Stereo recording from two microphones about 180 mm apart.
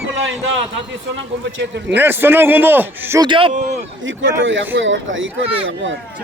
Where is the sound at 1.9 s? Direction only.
10° right (ahead or behind).